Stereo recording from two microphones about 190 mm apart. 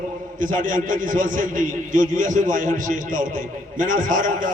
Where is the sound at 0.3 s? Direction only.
45° right (ahead or behind).